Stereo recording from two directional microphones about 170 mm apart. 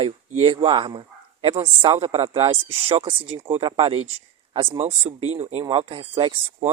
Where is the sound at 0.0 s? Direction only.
30° right (ahead or behind).